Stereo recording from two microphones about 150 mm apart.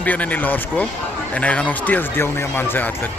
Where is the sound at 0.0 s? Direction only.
10° left (ahead or behind).